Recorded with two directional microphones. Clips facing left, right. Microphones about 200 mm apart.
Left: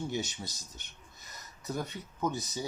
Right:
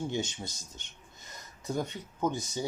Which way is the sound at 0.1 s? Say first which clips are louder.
Right 2 dB; 25° right (ahead or behind).